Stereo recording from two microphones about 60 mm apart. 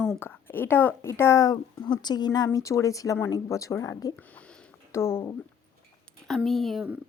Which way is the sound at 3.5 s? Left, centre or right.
Left.